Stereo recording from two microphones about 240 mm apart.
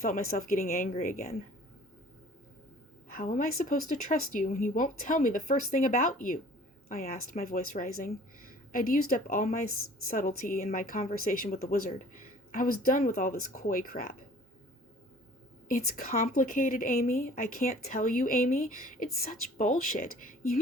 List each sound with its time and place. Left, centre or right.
0.0 s a woman's voice: left
3.1 s a woman's voice: left
15.7 s a woman's voice: left